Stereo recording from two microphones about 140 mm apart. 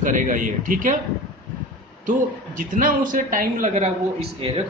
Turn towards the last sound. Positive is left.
turn(degrees=-45)  # may be behind; listen again after turning